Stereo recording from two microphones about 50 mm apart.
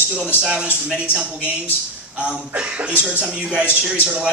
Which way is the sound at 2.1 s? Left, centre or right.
Right.